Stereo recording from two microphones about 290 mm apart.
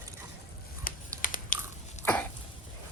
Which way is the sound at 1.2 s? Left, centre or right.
Left.